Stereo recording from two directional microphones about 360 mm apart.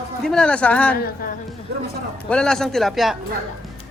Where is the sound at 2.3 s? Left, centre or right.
Centre.